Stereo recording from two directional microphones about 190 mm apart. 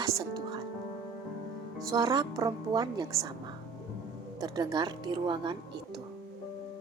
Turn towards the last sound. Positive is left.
turn(degrees=-25)  # may be behind; listen again after turning